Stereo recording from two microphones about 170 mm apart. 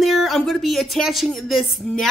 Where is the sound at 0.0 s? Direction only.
Centre (ahead or behind).